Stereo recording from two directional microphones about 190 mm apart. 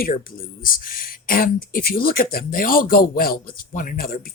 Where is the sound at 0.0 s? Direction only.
50° left (ahead or behind).